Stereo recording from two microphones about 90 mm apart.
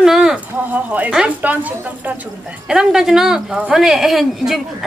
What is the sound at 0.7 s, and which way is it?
A woman's voice, 20° right (ahead or behind).